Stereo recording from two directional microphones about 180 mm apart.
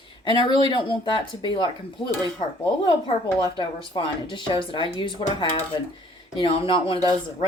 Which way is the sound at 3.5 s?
25° left (ahead or behind).